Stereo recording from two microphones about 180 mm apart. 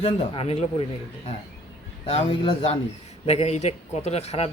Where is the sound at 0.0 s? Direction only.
35° left (ahead or behind).